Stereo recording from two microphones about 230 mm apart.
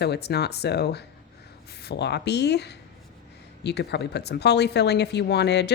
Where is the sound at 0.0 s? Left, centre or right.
Left.